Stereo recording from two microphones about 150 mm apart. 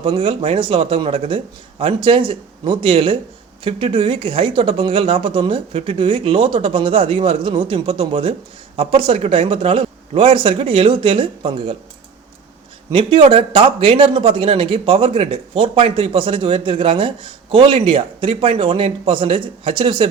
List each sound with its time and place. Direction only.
0.0 s speech: 35° right (ahead or behind)
12.9 s speech: 35° right (ahead or behind)